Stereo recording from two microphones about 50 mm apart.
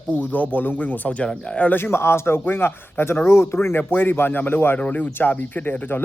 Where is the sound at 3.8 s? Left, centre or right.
Left.